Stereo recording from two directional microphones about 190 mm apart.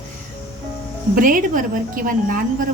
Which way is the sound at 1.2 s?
45° right (ahead or behind).